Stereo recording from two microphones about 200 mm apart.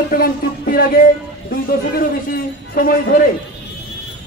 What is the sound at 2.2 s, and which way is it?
Speech, 45° left (ahead or behind).